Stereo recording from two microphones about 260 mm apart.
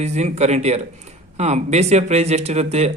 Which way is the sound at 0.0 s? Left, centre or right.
Right.